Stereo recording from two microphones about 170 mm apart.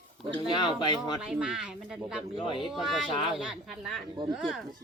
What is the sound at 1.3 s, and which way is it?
Speech, 5° right (ahead or behind).